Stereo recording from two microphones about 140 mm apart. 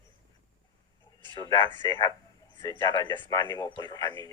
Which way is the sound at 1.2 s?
30° left (ahead or behind).